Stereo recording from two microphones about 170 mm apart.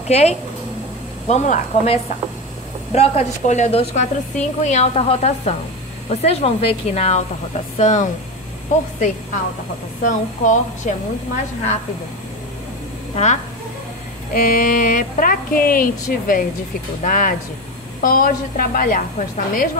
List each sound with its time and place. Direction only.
0.1 s a woman's voice: 40° left (ahead or behind)
10.0 s speech: 45° left (ahead or behind)
13.1 s speech: 45° left (ahead or behind)
14.3 s speech: 55° left (ahead or behind)